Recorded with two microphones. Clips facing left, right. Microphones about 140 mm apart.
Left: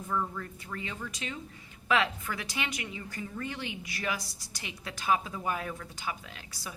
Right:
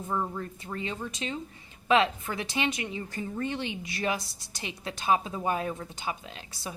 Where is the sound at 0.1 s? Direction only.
30° right (ahead or behind).